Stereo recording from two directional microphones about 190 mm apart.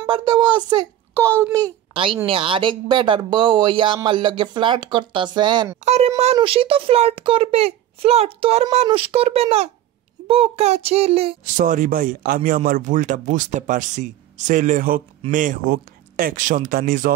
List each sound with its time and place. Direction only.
0.0 s speech: 25° right (ahead or behind)
5.8 s a child's voice: 35° right (ahead or behind)
11.5 s speech: 45° right (ahead or behind)